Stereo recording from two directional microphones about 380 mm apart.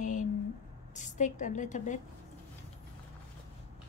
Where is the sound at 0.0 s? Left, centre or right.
Centre.